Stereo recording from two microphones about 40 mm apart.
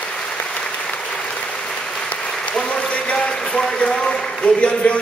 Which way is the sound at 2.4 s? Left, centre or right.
Left.